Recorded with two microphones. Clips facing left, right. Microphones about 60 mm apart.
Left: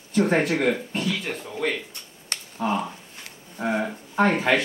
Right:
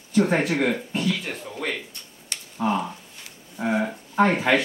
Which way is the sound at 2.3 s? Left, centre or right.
Left.